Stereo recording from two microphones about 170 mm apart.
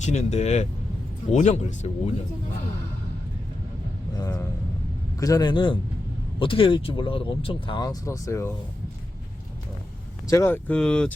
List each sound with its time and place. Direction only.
0.0 s a man's voice: 40° left (ahead or behind)
4.2 s speech: 20° left (ahead or behind)
10.2 s speech: 15° left (ahead or behind)